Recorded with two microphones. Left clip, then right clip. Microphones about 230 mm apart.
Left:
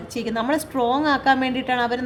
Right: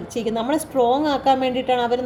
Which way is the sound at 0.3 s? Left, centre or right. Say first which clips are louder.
Even; left.